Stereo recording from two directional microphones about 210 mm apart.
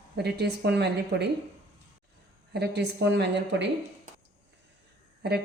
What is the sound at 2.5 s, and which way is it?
Speech, 50° right (ahead or behind).